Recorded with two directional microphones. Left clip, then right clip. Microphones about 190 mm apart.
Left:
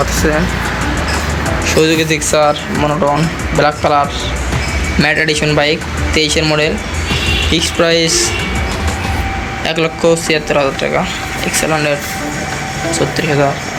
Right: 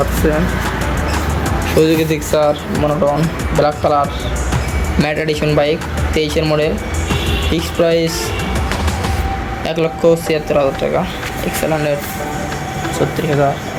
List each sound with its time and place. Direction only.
1.6 s speech: 10° right (ahead or behind)
9.6 s speech: 5° right (ahead or behind)